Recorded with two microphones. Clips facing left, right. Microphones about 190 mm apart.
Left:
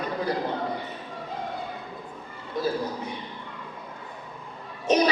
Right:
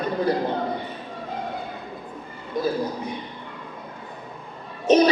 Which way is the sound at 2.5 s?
15° right (ahead or behind).